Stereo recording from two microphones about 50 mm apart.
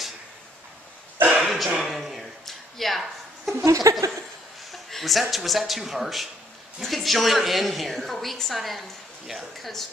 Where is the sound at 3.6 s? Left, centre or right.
Right.